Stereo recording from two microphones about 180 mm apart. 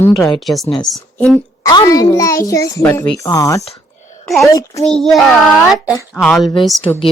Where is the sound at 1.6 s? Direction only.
20° left (ahead or behind).